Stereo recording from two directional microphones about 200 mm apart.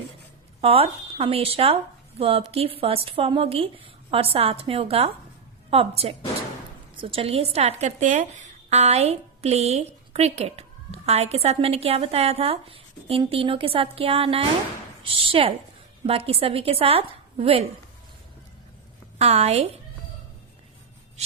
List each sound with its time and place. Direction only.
0.6 s speech: 30° right (ahead or behind)
19.2 s speech: 30° right (ahead or behind)